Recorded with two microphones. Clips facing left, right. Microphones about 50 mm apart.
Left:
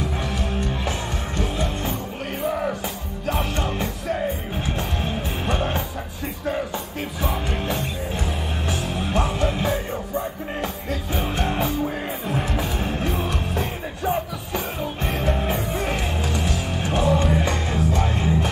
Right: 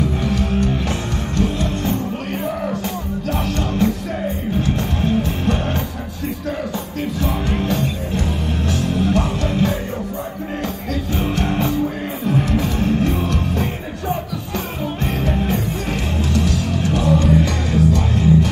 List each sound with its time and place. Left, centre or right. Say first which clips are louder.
0.2 s music: right 7 dB; centre
3.3 s music: right 1 dB; centre
7.2 s music: right 3 dB; centre
8.6 s music: right 8 dB; centre
11.3 s music: right 3 dB; centre
12.3 s music: right 7 dB; centre
15.5 s music: right 2 dB; centre